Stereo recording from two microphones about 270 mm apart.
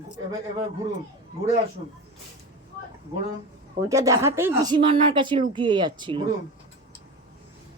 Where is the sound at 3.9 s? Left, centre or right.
Centre.